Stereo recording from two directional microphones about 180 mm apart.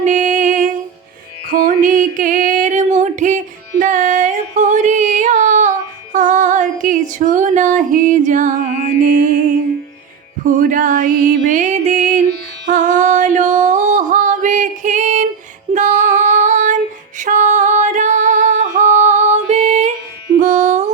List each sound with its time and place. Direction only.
0.0 s music: 45° right (ahead or behind)
1.5 s female singing: 50° right (ahead or behind)
10.4 s music: 50° right (ahead or behind)
15.7 s female singing: 45° right (ahead or behind)
17.2 s music: 45° right (ahead or behind)